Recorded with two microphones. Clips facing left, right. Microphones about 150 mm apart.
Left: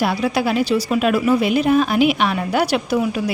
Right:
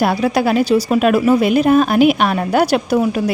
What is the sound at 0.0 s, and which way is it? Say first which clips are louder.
A woman's voice: right 4 dB; 45° right (ahead or behind).